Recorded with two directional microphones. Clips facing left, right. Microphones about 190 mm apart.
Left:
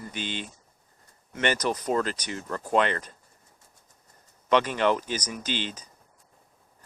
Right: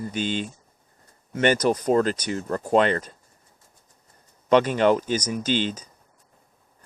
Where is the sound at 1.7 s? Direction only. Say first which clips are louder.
Right 6 dB; 35° right (ahead or behind).